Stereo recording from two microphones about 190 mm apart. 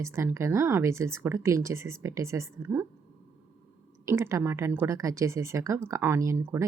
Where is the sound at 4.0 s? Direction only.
15° right (ahead or behind).